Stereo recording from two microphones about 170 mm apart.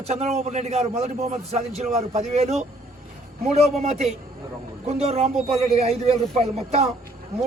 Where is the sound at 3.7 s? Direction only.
40° right (ahead or behind).